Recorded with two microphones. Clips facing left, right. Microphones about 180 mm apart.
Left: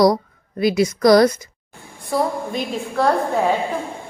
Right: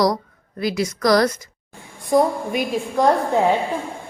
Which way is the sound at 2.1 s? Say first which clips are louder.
Right 4 dB; 15° right (ahead or behind).